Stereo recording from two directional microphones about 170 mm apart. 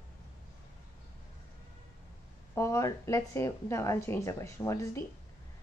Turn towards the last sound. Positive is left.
turn(degrees=15)  # may be behind; listen again after turning